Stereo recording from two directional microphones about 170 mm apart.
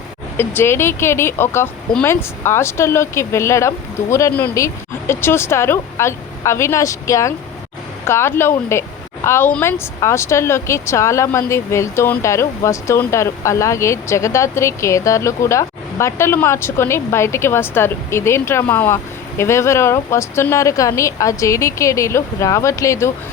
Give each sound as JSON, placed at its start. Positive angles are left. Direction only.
{"t": 0.3, "sound": "speech", "side_deg": 15}